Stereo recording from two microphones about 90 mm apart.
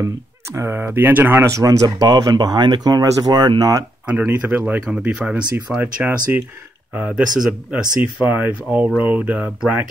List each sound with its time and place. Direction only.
0.6 s speech: 25° right (ahead or behind)
1.5 s speech: 40° right (ahead or behind)
4.0 s speech: 15° right (ahead or behind)